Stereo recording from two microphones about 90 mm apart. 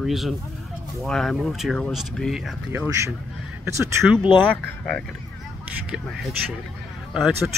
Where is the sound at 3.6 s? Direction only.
30° right (ahead or behind).